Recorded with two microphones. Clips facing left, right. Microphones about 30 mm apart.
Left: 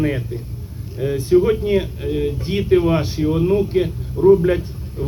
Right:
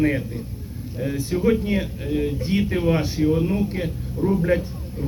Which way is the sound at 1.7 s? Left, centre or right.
Centre.